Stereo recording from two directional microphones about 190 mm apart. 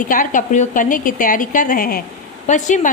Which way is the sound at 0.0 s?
45° left (ahead or behind).